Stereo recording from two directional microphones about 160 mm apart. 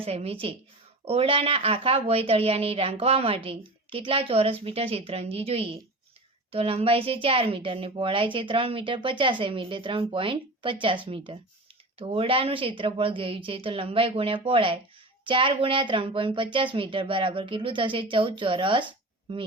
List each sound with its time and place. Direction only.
0.0 s a woman's voice: 40° right (ahead or behind)